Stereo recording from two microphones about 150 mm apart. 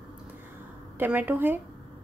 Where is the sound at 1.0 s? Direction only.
10° right (ahead or behind).